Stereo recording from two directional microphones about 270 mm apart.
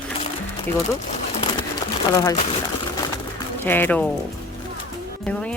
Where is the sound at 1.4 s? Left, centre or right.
Centre.